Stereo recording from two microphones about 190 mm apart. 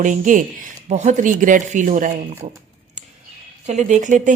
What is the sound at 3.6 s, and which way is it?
Speech, 40° right (ahead or behind).